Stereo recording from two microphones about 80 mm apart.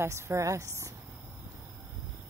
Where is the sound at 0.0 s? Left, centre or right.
Right.